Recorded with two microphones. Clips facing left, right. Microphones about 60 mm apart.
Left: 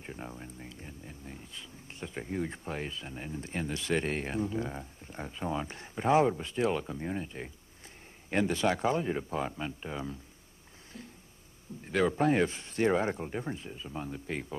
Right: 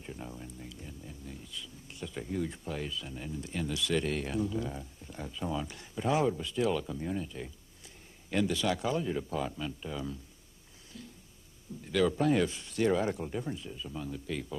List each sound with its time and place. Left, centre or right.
0.0 s speech: left
11.8 s speech: left